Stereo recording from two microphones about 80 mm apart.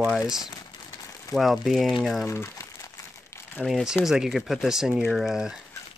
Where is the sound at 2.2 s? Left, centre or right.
Left.